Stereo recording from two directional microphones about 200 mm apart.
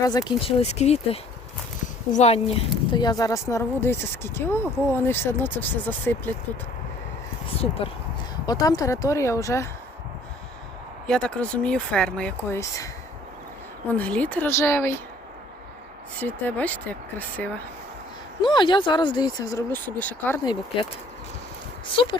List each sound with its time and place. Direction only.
0.0 s speech: 20° left (ahead or behind)
2.9 s speech: 20° left (ahead or behind)
7.8 s speech: 25° left (ahead or behind)
11.0 s speech: 5° left (ahead or behind)
16.2 s speech: 10° left (ahead or behind)
18.4 s speech: 25° left (ahead or behind)
20.4 s speech: 20° left (ahead or behind)
21.9 s speech: 25° left (ahead or behind)